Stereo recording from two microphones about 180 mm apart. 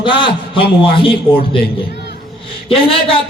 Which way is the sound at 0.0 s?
30° left (ahead or behind).